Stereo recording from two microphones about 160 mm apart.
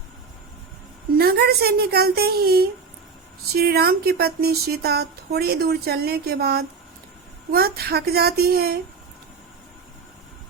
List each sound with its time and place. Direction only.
1.2 s speech: 75° right (ahead or behind)